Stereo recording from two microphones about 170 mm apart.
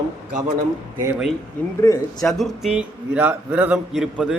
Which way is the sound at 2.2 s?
Centre (ahead or behind).